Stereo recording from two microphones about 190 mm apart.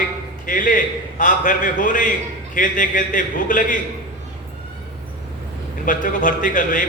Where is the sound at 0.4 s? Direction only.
45° left (ahead or behind).